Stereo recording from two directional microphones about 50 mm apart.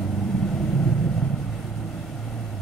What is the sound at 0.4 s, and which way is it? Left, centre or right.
Vehicle, centre.